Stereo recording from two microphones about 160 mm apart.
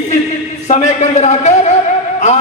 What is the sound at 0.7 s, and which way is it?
A man's voice, 45° left (ahead or behind).